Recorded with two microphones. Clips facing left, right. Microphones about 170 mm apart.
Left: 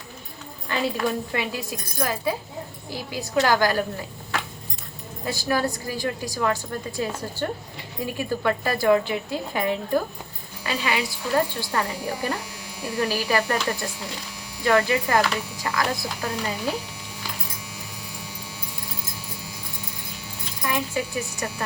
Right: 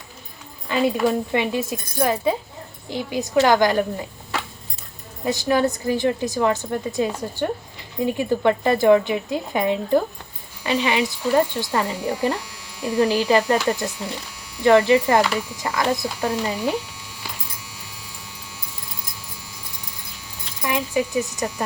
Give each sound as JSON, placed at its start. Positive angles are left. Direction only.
{"t": 0.7, "sound": "a woman's voice", "side_deg": -20}
{"t": 5.2, "sound": "a woman's voice", "side_deg": -20}
{"t": 20.6, "sound": "speech", "side_deg": -20}